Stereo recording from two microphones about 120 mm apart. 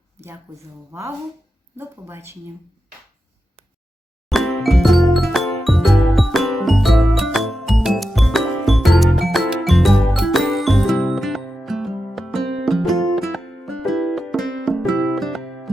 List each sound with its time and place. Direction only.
1.7 s speech: 20° right (ahead or behind)
4.3 s music: centre (ahead or behind)